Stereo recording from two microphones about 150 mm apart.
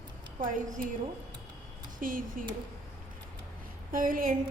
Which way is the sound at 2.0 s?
65° right (ahead or behind).